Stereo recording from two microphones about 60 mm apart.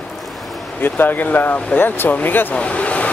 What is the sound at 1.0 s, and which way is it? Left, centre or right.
Speech, left.